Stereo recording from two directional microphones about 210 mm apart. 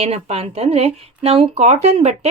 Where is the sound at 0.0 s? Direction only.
30° right (ahead or behind).